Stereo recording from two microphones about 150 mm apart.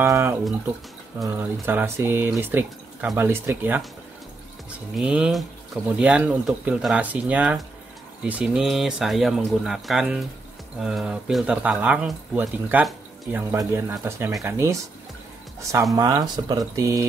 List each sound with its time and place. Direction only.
0.0 s speech: 15° right (ahead or behind)
4.9 s speech: 5° right (ahead or behind); by 17.0 s 25° right (ahead or behind)